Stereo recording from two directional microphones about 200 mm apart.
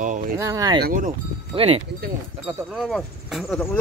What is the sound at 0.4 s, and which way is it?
Speech, 15° right (ahead or behind).